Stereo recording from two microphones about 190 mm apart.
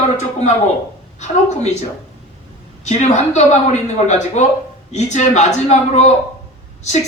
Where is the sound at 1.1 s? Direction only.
35° left (ahead or behind).